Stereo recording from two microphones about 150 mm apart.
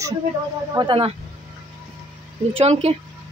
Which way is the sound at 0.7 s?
35° right (ahead or behind).